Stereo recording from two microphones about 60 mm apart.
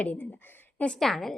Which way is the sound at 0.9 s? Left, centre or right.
Centre.